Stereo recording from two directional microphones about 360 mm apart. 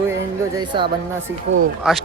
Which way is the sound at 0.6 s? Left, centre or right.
Centre.